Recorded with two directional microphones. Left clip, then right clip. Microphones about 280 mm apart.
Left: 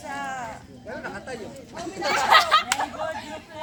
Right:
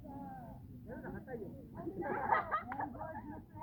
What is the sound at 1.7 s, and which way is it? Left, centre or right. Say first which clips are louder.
Chatter: left 15 dB; left.